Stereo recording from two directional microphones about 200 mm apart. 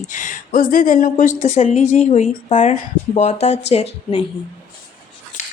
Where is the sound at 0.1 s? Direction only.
40° left (ahead or behind).